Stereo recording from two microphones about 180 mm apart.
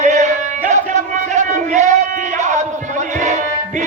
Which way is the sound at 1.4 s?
40° right (ahead or behind).